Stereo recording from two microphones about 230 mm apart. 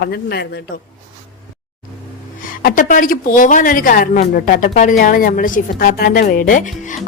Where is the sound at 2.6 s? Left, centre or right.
Left.